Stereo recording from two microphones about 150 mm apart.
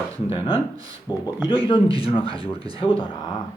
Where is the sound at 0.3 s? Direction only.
35° left (ahead or behind).